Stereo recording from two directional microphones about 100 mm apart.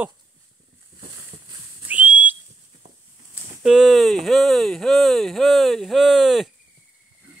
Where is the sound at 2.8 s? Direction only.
90° right.